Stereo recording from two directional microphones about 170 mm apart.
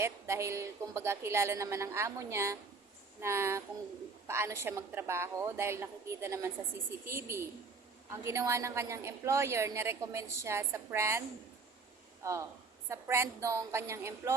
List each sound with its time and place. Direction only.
0.0 s a woman's voice: 15° right (ahead or behind)
12.2 s a woman's voice: 20° right (ahead or behind)